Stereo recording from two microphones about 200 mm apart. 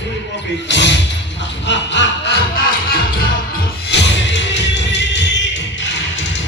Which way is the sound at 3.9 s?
65° left (ahead or behind).